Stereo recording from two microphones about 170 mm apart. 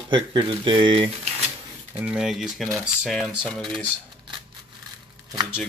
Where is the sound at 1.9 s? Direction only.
5° right (ahead or behind).